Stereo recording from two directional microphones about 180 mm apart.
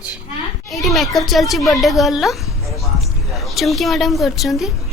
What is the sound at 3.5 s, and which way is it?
A child's voice, centre (ahead or behind).